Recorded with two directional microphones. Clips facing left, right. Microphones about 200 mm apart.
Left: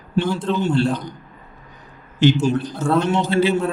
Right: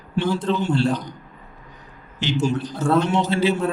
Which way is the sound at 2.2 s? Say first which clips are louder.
Left 11 dB; 50° left (ahead or behind).